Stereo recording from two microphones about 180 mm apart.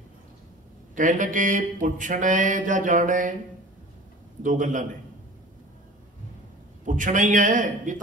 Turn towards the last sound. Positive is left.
turn(degrees=-45)  # may be behind; listen again after turning